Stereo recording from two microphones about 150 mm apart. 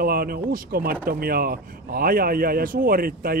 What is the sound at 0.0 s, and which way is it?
Speech, 85° right.